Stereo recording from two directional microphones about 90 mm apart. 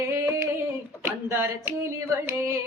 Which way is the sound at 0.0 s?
35° right (ahead or behind).